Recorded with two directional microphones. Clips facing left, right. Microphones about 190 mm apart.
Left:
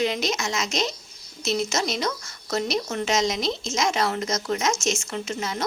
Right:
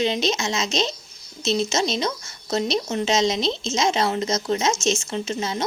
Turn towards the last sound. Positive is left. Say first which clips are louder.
# right 3 dB
turn(degrees=-25)  # may be behind; listen again after turning